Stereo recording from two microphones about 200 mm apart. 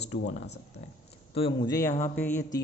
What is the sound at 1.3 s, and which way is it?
A man's voice, 25° left (ahead or behind).